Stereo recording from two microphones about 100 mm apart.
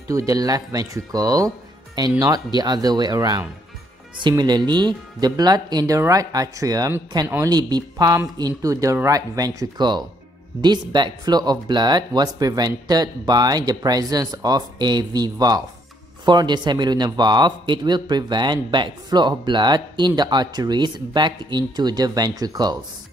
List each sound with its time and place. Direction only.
0.1 s speech: 35° right (ahead or behind)
9.8 s speech: 45° right (ahead or behind)